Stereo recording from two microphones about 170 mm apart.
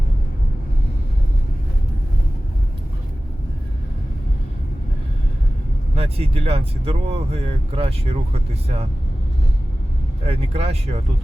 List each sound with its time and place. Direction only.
6.0 s speech: 35° right (ahead or behind)
10.2 s speech: 35° right (ahead or behind)